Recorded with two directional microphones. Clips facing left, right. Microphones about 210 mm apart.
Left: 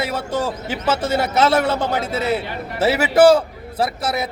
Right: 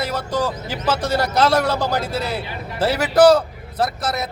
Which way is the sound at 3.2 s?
25° left (ahead or behind).